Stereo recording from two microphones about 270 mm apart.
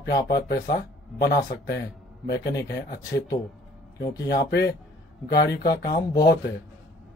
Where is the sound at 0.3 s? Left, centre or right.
Left.